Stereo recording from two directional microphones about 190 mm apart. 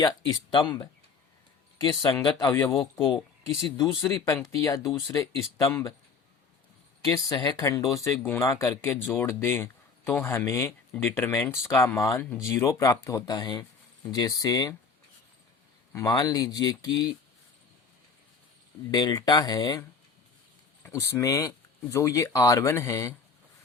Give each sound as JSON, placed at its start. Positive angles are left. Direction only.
{"t": 1.8, "sound": "speech", "side_deg": 20}
{"t": 7.3, "sound": "speech", "side_deg": 20}
{"t": 15.9, "sound": "speech", "side_deg": 15}
{"t": 18.9, "sound": "speech", "side_deg": 20}
{"t": 20.8, "sound": "speech", "side_deg": 15}